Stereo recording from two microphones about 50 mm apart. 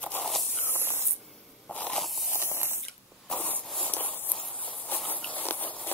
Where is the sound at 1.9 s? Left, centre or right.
Centre.